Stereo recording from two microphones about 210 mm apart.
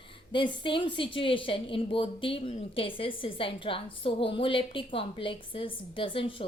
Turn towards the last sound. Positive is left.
turn(degrees=25)  # may be behind; listen again after turning